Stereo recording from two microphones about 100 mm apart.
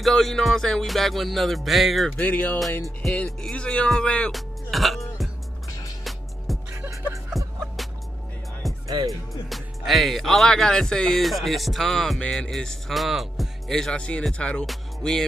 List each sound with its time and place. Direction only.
0.0 s speech: centre (ahead or behind)
2.1 s speech: 15° left (ahead or behind)
4.3 s music: centre (ahead or behind)
8.6 s music: centre (ahead or behind)
9.5 s speech: centre (ahead or behind)
14.7 s music: 5° left (ahead or behind)